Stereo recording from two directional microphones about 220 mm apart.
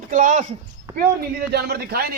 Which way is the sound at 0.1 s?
35° right (ahead or behind).